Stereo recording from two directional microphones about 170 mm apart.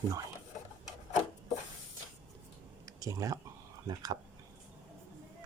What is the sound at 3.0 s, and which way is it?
Speech, 20° right (ahead or behind).